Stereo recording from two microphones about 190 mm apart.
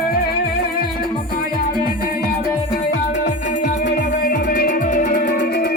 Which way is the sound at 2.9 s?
45° left (ahead or behind).